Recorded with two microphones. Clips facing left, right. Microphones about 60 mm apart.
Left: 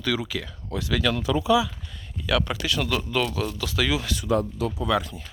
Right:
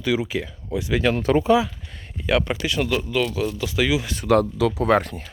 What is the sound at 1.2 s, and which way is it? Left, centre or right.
Speech, right.